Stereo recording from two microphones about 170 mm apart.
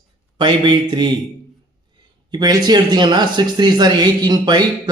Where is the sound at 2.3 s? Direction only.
25° right (ahead or behind).